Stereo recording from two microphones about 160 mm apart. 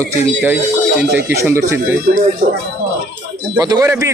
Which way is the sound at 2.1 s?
90° right.